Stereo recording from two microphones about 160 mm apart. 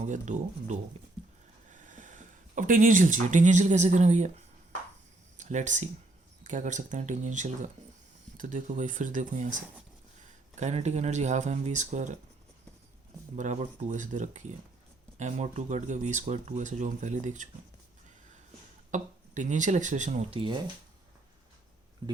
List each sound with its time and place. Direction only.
0.0 s speech: 50° right (ahead or behind)
13.3 s speech: 50° right (ahead or behind)
18.9 s speech: 50° right (ahead or behind)